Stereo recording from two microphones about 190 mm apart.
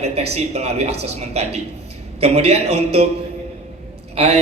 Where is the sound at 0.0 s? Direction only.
35° right (ahead or behind).